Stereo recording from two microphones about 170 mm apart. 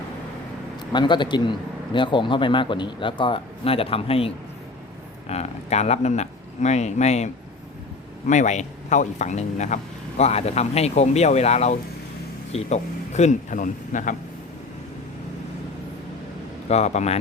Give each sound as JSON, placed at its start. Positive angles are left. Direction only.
{"t": 0.9, "sound": "a man's voice", "side_deg": 25}
{"t": 5.3, "sound": "speech", "side_deg": 40}
{"t": 8.3, "sound": "a man's voice", "side_deg": 45}
{"t": 16.6, "sound": "speech", "side_deg": 40}